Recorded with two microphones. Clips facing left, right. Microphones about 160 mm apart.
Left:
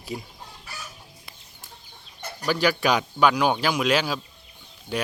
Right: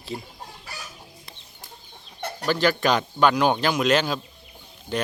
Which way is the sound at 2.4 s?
10° left (ahead or behind).